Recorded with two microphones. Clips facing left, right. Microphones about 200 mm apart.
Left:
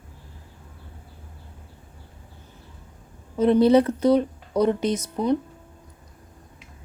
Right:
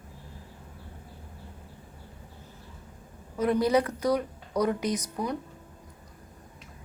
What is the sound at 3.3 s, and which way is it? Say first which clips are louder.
Speech: left 7 dB; 25° left (ahead or behind).